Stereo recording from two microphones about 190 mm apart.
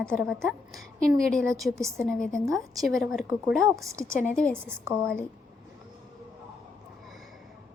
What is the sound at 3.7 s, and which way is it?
Speech, 15° right (ahead or behind).